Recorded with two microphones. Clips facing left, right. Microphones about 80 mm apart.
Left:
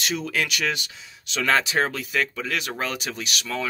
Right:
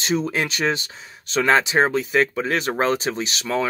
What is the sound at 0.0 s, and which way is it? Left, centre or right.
Speech, right.